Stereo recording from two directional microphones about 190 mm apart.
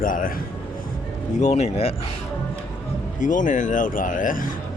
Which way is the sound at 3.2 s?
45° left (ahead or behind).